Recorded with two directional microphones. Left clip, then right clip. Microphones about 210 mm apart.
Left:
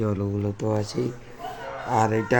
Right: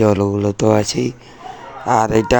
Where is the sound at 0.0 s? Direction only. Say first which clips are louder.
Right 13 dB; 40° right (ahead or behind).